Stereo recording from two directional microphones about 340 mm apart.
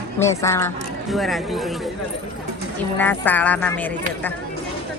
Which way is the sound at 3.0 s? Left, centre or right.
Centre.